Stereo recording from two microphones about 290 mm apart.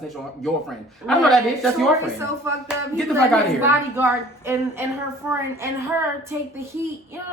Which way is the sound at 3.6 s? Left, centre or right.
Centre.